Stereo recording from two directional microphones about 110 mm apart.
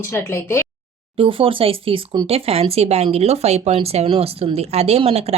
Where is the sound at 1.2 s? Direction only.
55° right (ahead or behind).